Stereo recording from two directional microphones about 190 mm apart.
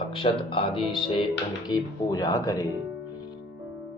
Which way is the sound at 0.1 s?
30° left (ahead or behind).